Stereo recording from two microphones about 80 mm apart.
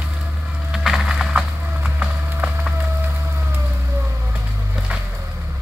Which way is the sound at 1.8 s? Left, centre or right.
Centre.